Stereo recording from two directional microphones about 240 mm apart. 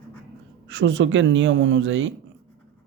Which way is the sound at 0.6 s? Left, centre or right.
Right.